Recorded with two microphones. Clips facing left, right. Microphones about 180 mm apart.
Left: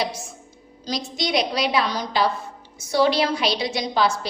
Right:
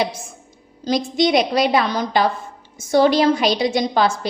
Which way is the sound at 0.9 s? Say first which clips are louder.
Right 9 dB; 55° right (ahead or behind).